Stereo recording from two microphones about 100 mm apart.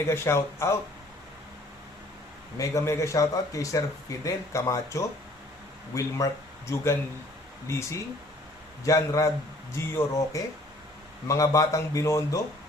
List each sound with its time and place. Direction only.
0.1 s speech: 25° left (ahead or behind)
2.6 s a man's voice: 30° left (ahead or behind)